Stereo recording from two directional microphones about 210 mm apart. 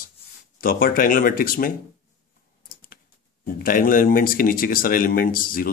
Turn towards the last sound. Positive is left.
turn(degrees=40)  # may be behind; listen again after turning